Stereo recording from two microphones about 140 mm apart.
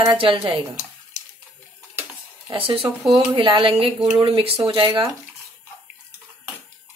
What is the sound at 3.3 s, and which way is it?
Speech, 35° right (ahead or behind).